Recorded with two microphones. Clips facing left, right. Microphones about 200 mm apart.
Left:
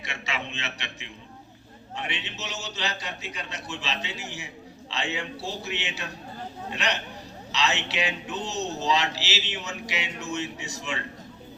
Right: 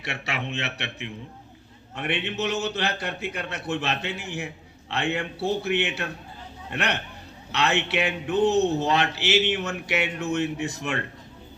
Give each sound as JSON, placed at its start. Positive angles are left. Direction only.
{"t": 0.0, "sound": "a man's voice", "side_deg": -65}